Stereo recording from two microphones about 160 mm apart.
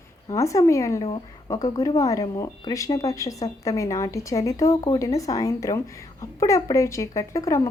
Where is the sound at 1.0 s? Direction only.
30° left (ahead or behind).